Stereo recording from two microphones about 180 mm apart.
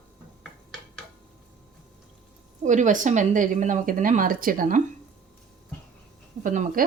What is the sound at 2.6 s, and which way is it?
Speech, 45° right (ahead or behind).